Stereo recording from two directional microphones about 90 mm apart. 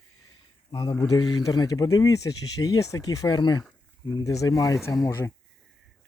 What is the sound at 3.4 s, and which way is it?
Speech, 55° left (ahead or behind).